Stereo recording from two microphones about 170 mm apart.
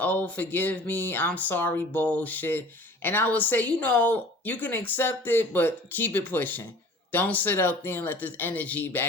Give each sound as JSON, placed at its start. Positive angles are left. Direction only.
{"t": 0.0, "sound": "speech", "side_deg": 10}